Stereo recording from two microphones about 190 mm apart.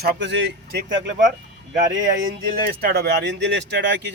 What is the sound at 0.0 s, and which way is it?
Speech, 60° right (ahead or behind).